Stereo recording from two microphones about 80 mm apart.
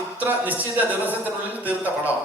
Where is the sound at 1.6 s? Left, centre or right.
Centre.